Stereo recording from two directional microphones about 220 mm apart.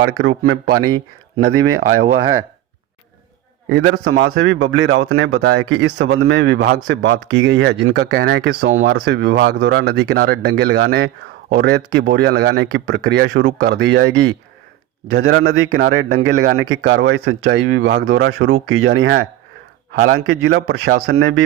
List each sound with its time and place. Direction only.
0.0 s speech: 55° right (ahead or behind)
1.9 s speech: 40° right (ahead or behind)
3.7 s a man's voice: 50° right (ahead or behind)
18.4 s speech: 70° right (ahead or behind)
18.9 s speech: 50° right (ahead or behind)